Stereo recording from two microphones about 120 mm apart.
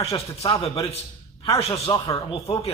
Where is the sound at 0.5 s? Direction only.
45° left (ahead or behind).